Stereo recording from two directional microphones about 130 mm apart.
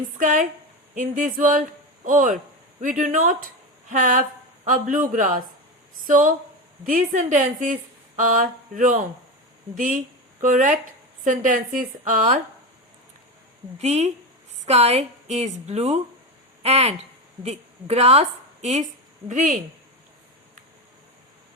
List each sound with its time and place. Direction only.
0.2 s a woman's voice: 80° right
7.2 s a woman's voice: 75° right (ahead or behind)
8.1 s a man's voice: 90° right; by 12.4 s 70° right (ahead or behind)
13.7 s a woman's voice: 60° right (ahead or behind)
19.3 s a woman's voice: 75° right (ahead or behind)